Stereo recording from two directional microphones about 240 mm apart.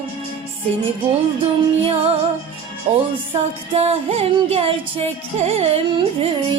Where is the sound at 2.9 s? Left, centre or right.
Right.